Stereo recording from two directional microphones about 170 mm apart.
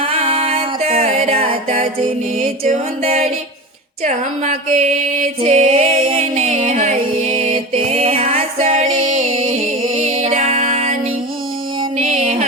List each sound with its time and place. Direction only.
0.1 s music: 35° right (ahead or behind)
5.6 s music: 35° right (ahead or behind)
8.7 s music: 50° right (ahead or behind)
10.3 s music: 35° right (ahead or behind)
11.9 s music: 35° right (ahead or behind)